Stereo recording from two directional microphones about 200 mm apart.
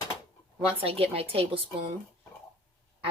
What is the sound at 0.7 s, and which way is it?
Speech, 30° right (ahead or behind).